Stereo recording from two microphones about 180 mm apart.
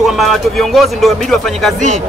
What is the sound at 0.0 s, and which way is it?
Speech, centre (ahead or behind).